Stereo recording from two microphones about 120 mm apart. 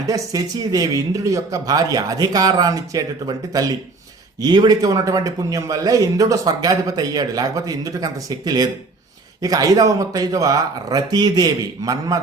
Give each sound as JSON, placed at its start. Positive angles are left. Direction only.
{"t": 0.1, "sound": "a man's voice", "side_deg": -35}